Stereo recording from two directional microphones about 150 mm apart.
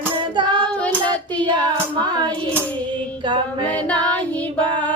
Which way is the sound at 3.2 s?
30° right (ahead or behind).